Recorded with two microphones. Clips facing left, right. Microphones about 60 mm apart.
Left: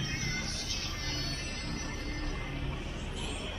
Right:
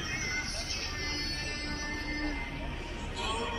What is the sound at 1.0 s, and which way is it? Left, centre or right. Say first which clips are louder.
Music: right 2 dB; right.